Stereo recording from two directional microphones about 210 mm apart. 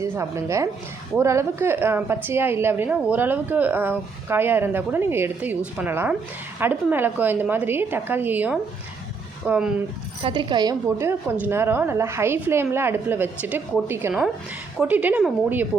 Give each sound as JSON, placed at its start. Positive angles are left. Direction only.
{"t": 0.0, "sound": "a woman's voice", "side_deg": -15}
{"t": 10.2, "sound": "a woman's voice", "side_deg": -20}
{"t": 10.8, "sound": "a woman's voice", "side_deg": -10}